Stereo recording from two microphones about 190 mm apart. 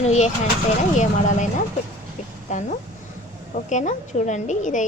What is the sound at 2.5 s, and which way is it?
Speech, 40° left (ahead or behind).